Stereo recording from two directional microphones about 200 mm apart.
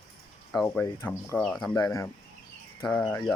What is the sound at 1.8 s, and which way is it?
Speech, 15° left (ahead or behind).